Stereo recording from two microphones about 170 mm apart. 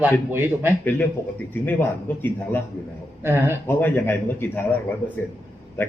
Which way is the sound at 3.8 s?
10° left (ahead or behind).